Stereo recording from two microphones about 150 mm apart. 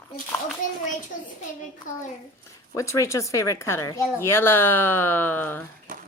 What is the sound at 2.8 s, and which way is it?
Speech, 20° left (ahead or behind).